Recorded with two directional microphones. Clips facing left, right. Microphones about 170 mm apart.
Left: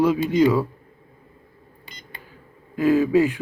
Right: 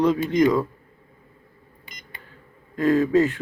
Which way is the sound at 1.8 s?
30° left (ahead or behind).